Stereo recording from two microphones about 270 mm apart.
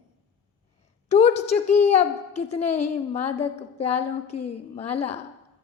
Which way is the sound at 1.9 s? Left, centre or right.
Left.